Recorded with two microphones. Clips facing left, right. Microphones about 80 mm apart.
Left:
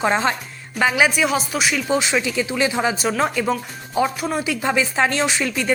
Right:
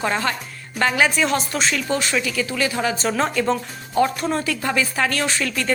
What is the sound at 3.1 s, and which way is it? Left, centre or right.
A woman's voice, centre.